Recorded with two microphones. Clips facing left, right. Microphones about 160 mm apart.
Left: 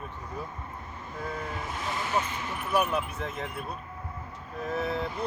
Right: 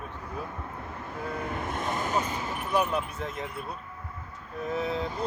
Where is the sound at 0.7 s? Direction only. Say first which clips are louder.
Right 3 dB; 65° right (ahead or behind).